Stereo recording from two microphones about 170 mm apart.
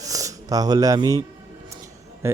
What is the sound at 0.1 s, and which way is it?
Speech, 20° right (ahead or behind).